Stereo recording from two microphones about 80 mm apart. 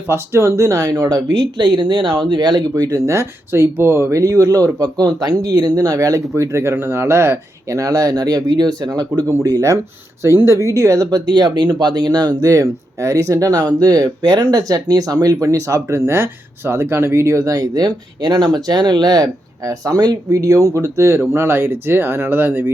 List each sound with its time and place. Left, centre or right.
0.1 s speech: right
3.1 s speech: right
7.8 s speech: right
8.9 s speech: right
16.0 s speech: right